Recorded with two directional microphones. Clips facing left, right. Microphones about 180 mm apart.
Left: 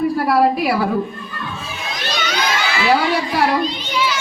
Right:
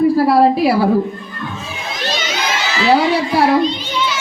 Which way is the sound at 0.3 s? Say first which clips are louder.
Right 4 dB; 30° right (ahead or behind).